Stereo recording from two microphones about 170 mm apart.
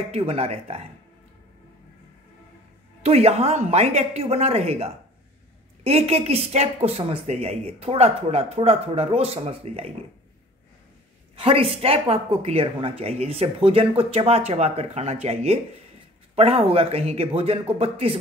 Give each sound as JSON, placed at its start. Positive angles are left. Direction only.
{"t": 0.1, "sound": "speech", "side_deg": -35}
{"t": 3.0, "sound": "speech", "side_deg": -40}
{"t": 11.3, "sound": "speech", "side_deg": -35}